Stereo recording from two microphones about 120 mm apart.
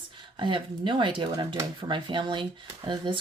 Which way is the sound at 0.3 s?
45° right (ahead or behind).